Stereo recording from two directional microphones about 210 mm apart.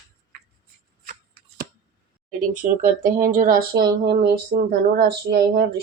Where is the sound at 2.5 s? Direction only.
40° right (ahead or behind).